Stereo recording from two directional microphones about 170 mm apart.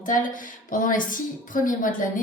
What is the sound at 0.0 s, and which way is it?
A woman's voice, 50° left (ahead or behind).